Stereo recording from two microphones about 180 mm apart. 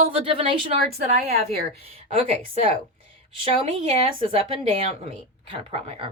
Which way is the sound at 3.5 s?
30° right (ahead or behind).